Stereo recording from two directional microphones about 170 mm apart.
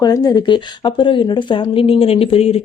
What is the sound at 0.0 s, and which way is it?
A woman's voice, 20° left (ahead or behind).